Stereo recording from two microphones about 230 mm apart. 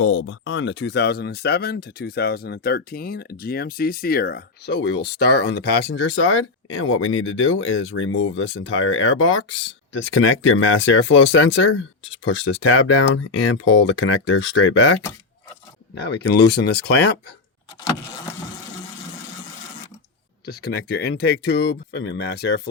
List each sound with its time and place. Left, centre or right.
0.0 s speech: left
16.1 s speech: left
20.4 s speech: left